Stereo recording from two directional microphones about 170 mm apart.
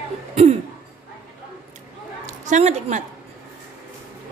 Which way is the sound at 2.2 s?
45° right (ahead or behind).